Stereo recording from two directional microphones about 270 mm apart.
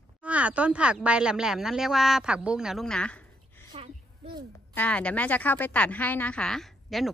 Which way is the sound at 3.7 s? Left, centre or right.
Right.